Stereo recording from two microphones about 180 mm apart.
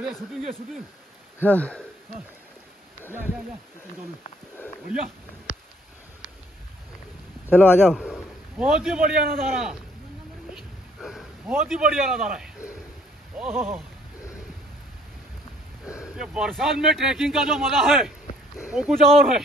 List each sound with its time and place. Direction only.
0.0 s speech: centre (ahead or behind)
5.5 s a sound: 50° left (ahead or behind)
7.5 s speech: 10° left (ahead or behind)
8.0 s a man's voice: 5° right (ahead or behind)
10.5 s a sound: centre (ahead or behind)
11.7 s speech: centre (ahead or behind)
16.0 s speech: 5° right (ahead or behind)